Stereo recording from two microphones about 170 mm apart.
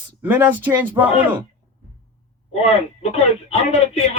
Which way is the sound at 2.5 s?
40° left (ahead or behind).